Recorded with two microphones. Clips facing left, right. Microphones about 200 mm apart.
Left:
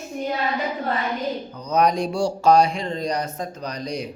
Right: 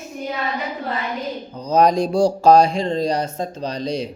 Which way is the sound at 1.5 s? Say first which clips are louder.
Right 5 dB; 30° right (ahead or behind).